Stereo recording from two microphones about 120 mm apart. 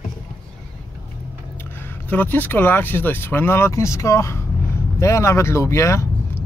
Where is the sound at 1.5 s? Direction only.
20° left (ahead or behind).